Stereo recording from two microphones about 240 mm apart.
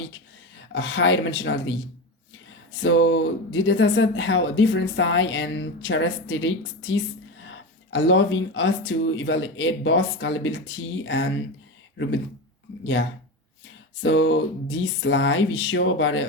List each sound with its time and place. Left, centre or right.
0.7 s speech: left
12.8 s speech: left